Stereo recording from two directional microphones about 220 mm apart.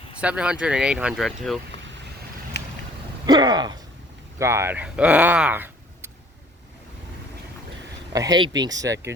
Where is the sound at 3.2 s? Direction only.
20° right (ahead or behind).